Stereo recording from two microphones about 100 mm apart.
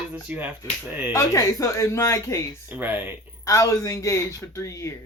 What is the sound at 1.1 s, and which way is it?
Speech, 30° left (ahead or behind).